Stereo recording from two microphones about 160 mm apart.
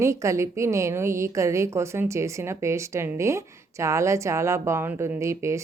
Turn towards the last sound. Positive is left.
turn(degrees=-20)  # may be behind; listen again after turning